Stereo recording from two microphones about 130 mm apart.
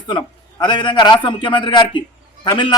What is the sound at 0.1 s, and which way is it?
A man's voice, 35° left (ahead or behind).